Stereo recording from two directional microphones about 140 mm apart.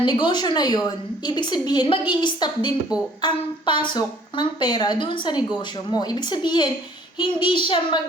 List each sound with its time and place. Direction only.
0.0 s speech: 35° left (ahead or behind)